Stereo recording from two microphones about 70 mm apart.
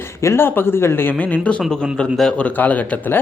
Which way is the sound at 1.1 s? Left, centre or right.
Centre.